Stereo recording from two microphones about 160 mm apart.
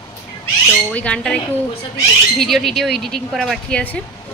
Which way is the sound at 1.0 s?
5° left (ahead or behind).